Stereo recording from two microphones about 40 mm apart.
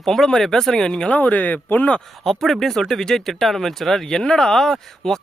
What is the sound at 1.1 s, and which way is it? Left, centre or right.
Speech, left.